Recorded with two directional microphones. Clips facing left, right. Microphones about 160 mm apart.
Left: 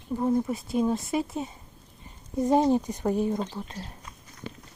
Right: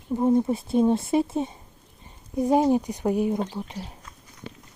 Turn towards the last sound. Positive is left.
turn(degrees=-15)  # may be behind; listen again after turning